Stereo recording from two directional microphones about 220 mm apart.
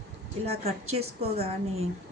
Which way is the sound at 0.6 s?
30° right (ahead or behind).